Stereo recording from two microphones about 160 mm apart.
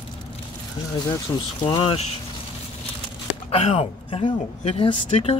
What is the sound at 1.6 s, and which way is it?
Speech, 35° left (ahead or behind).